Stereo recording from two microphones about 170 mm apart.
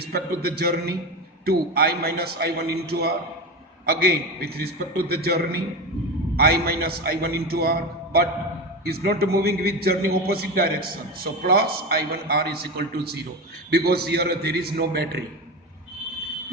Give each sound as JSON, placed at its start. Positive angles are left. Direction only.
{"t": 0.0, "sound": "a man's voice", "side_deg": -65}